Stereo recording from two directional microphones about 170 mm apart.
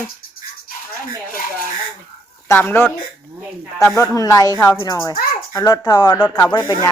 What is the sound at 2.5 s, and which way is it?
Speech, 15° left (ahead or behind).